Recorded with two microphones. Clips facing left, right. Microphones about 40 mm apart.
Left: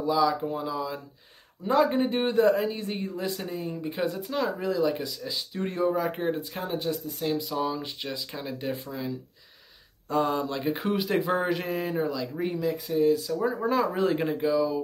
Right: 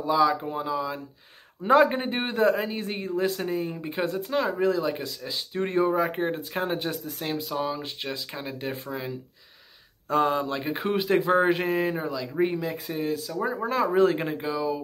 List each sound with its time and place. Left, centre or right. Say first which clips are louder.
0.0 s speech: right 2 dB; right
1.6 s speech: right 3 dB; right
2.2 s speech: even; centre
2.7 s speech: right 3 dB; right
6.6 s speech: right 3 dB; right
7.2 s speech: left 4 dB; right
7.6 s speech: even; centre